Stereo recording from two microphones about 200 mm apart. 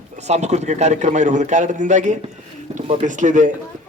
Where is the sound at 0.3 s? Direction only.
35° right (ahead or behind).